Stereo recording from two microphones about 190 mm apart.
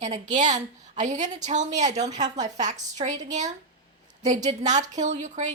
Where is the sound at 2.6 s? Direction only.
40° right (ahead or behind).